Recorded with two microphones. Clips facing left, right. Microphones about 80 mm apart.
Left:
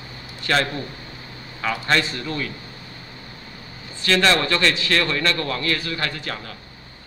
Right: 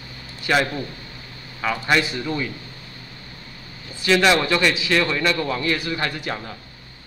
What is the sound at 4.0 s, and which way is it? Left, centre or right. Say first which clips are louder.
A man's voice: right 2 dB; centre.